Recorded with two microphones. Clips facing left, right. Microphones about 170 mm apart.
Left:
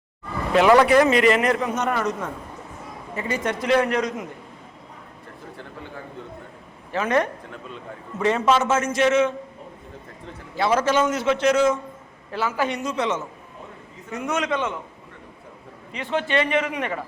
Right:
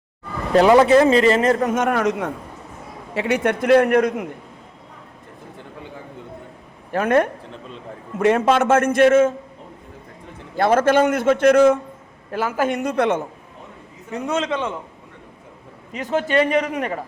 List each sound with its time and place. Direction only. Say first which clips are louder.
0.7 s speech: right 2 dB; 25° right (ahead or behind)
1.6 s a man's voice: right 5 dB; 50° right (ahead or behind)
2.0 s a man's voice: right 5 dB; 70° right (ahead or behind)
6.9 s a man's voice: right 4 dB; 55° right (ahead or behind)
10.6 s a man's voice: right 5 dB; 50° right (ahead or behind)
12.3 s a man's voice: right 3 dB; 50° right (ahead or behind)
14.1 s a man's voice: right 2 dB; 30° right (ahead or behind)
15.9 s a man's voice: right 3 dB; 40° right (ahead or behind)